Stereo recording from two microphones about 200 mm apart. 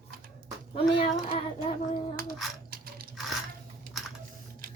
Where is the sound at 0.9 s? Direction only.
25° left (ahead or behind).